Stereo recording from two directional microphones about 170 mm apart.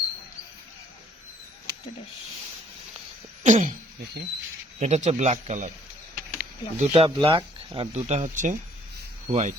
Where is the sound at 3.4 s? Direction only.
50° right (ahead or behind).